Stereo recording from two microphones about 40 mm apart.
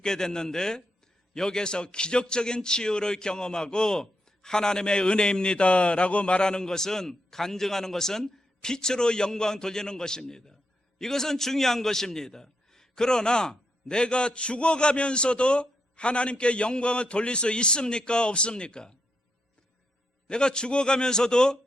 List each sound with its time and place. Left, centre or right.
0.0 s a man's voice: centre
20.2 s a man's voice: left